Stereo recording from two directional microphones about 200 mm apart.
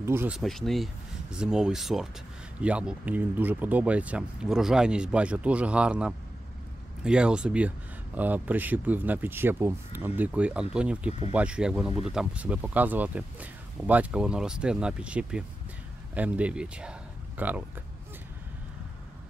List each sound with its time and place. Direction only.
0.0 s speech: 10° right (ahead or behind)
0.4 s speech: centre (ahead or behind)